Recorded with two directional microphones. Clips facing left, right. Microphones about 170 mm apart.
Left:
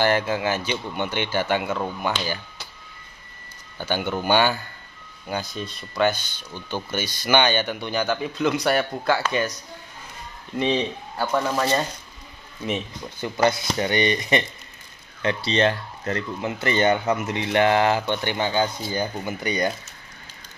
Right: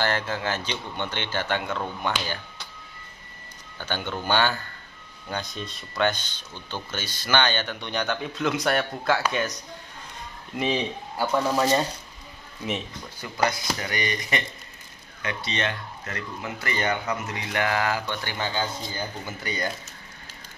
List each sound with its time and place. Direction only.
0.0 s speech: 10° left (ahead or behind)
3.7 s speech: 10° left (ahead or behind)
11.1 s speech: 10° right (ahead or behind)
13.2 s speech: 25° left (ahead or behind)